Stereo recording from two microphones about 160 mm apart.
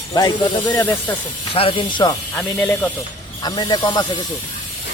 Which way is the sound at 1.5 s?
35° left (ahead or behind).